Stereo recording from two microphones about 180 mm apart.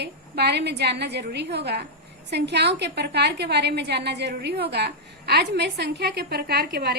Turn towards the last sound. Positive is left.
turn(degrees=-60)  # may be behind; listen again after turning